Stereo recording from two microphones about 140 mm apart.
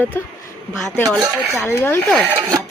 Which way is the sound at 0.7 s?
Centre (ahead or behind).